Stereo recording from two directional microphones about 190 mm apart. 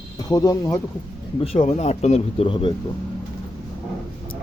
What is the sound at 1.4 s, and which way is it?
Speech, 35° left (ahead or behind).